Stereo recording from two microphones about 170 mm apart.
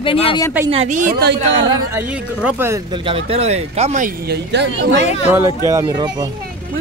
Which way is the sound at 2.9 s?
30° right (ahead or behind).